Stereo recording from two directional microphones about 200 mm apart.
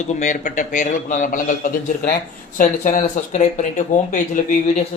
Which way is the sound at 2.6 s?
40° left (ahead or behind).